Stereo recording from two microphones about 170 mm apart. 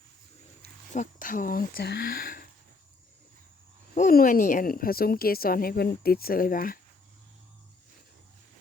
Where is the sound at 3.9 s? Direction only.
55° left (ahead or behind).